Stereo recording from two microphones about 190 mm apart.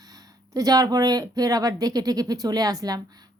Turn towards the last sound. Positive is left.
turn(degrees=-20)  # may be behind; listen again after turning